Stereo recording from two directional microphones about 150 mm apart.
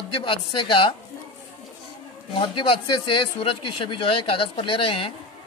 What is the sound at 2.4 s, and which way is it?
Speech, 35° left (ahead or behind).